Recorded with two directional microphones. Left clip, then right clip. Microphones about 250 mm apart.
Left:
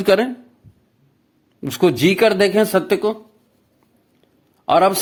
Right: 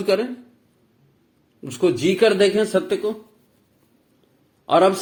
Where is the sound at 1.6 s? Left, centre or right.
Left.